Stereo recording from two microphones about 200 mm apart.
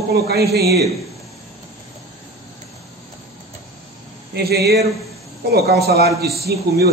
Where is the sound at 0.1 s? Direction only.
50° right (ahead or behind).